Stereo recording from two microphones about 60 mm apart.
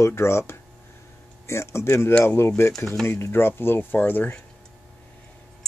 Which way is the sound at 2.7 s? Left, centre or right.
Centre.